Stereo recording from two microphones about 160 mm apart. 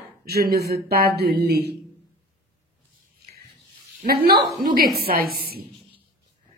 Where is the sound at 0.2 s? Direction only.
75° right (ahead or behind); by 1.8 s 90° right.